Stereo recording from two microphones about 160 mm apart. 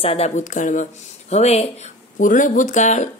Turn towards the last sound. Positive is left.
turn(degrees=50)  # may be behind; listen again after turning